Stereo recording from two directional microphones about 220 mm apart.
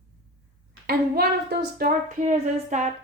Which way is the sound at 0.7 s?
45° right (ahead or behind).